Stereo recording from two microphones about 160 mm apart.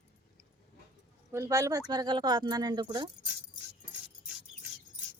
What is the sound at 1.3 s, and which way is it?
Speech, 20° right (ahead or behind).